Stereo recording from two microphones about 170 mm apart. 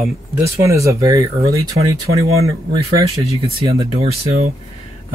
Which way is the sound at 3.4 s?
35° right (ahead or behind).